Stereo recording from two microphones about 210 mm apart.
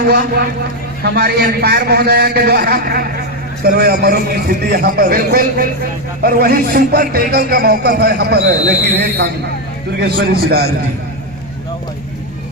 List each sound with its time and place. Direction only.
0.1 s speech: 50° right (ahead or behind)